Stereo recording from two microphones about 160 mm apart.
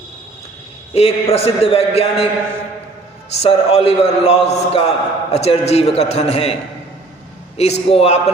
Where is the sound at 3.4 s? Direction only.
40° left (ahead or behind).